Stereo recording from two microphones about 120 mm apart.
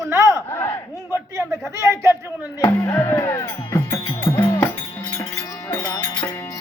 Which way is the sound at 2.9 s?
20° left (ahead or behind).